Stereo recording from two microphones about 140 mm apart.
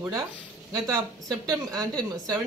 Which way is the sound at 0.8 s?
25° right (ahead or behind).